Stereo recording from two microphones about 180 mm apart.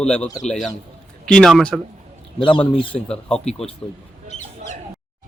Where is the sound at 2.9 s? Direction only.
5° left (ahead or behind).